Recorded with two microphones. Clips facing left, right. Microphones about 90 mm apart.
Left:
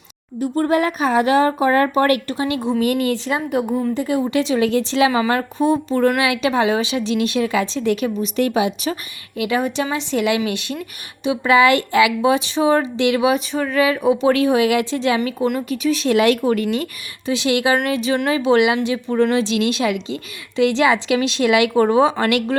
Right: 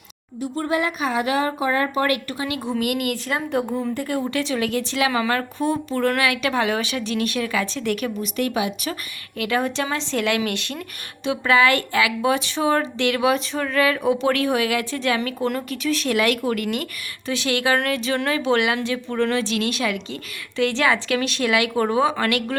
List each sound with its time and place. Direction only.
0.3 s speech: 45° left (ahead or behind)
3.3 s speech: 15° left (ahead or behind)
9.4 s speech: 10° left (ahead or behind)
15.2 s speech: 10° left (ahead or behind)